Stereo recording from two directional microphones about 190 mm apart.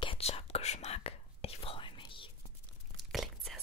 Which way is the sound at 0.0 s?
30° left (ahead or behind).